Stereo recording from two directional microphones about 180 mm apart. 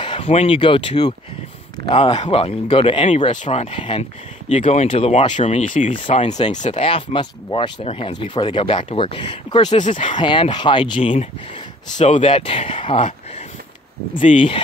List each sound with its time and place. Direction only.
0.0 s speech: 30° left (ahead or behind)
14.3 s speech: 40° left (ahead or behind)